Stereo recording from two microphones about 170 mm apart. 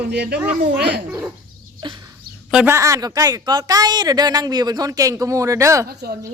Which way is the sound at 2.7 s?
20° right (ahead or behind).